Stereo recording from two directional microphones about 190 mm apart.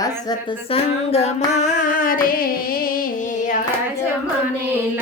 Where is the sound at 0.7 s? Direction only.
35° left (ahead or behind).